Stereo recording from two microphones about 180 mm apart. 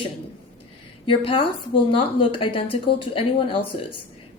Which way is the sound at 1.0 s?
30° left (ahead or behind).